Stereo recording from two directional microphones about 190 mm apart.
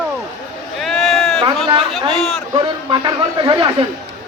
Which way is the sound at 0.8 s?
Centre (ahead or behind).